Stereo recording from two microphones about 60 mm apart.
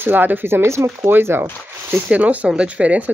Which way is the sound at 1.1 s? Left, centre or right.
Right.